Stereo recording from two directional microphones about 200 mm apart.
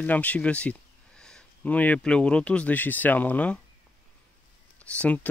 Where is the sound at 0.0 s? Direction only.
10° left (ahead or behind).